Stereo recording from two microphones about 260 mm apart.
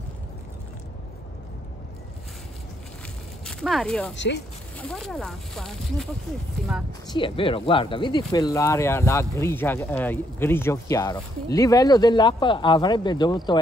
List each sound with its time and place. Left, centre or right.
3.4 s speech: centre
4.1 s speech: left
4.7 s speech: centre
7.1 s speech: centre